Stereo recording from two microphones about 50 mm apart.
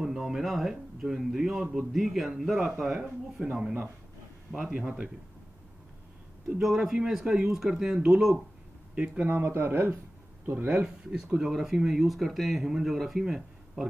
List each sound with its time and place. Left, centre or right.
0.0 s speech: centre
4.8 s speech: right
6.6 s speech: centre
8.9 s speech: right
9.4 s a man's voice: right
11.3 s speech: centre